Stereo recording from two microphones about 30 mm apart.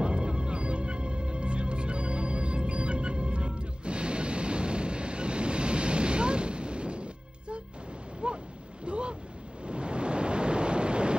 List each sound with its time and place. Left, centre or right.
0.0 s music: right
8.2 s a sound: right
8.8 s boat: right
9.7 s waves: right